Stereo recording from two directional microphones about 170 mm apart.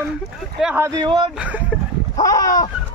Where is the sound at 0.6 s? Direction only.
10° right (ahead or behind).